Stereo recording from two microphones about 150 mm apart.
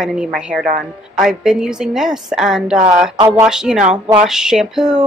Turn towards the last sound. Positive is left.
turn(degrees=-5)  # may be behind; listen again after turning